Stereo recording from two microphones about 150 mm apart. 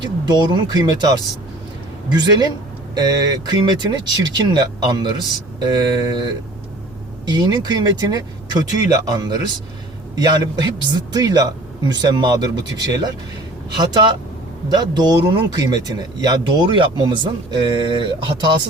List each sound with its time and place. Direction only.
0.0 s speech: 30° right (ahead or behind)